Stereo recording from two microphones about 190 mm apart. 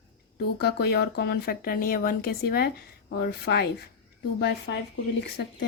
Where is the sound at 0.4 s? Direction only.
60° left (ahead or behind).